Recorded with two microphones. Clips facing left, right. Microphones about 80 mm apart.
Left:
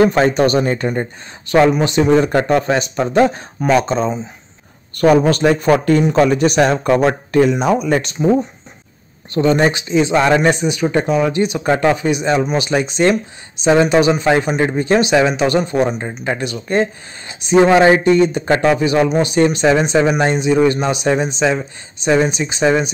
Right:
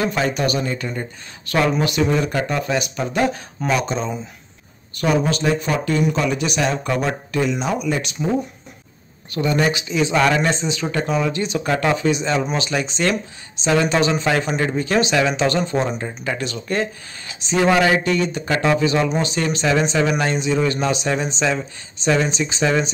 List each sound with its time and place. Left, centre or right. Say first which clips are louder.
0.0 s speech: left 8 dB; left
1.8 s speech: left 4 dB; left
2.0 s speech: left 8 dB; left
4.9 s speech: left 8 dB; left
9.3 s speech: left 6 dB; left
10.5 s speech: left 6 dB; centre
14.6 s speech: left 5 dB; left